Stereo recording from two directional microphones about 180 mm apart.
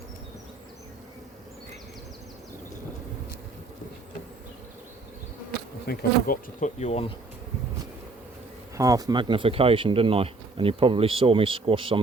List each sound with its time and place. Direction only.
5.8 s bee: 60° left (ahead or behind)
6.7 s speech: 40° left (ahead or behind)
8.7 s speech: 20° right (ahead or behind)